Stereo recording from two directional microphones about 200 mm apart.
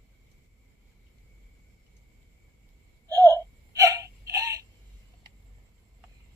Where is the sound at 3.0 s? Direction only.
15° right (ahead or behind).